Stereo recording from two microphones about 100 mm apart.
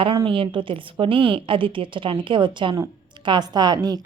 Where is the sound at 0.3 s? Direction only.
60° right (ahead or behind).